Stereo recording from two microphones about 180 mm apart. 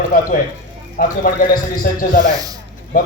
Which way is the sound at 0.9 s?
50° left (ahead or behind).